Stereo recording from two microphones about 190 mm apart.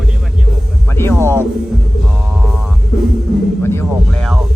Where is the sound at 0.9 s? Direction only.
10° left (ahead or behind).